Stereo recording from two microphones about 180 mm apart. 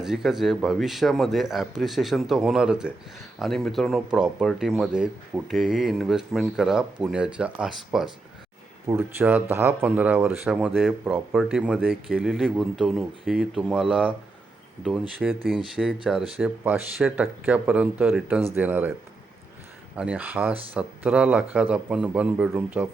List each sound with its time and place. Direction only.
0.0 s speech: 5° right (ahead or behind)
20.0 s speech: 5° right (ahead or behind)